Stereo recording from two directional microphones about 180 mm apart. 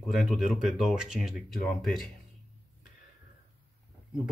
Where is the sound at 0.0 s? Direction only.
Centre (ahead or behind).